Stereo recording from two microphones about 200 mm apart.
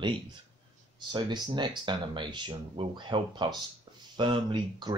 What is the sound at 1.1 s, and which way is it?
Speech, 20° right (ahead or behind).